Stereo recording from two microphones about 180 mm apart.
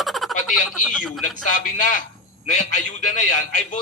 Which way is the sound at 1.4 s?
50° left (ahead or behind).